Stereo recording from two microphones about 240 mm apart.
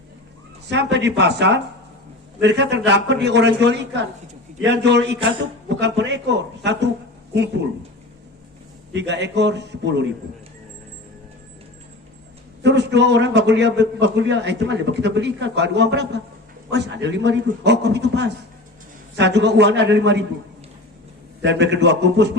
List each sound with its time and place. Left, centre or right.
0.7 s a man's voice: right
8.9 s a man's voice: right
12.6 s a man's voice: right
21.4 s a man's voice: right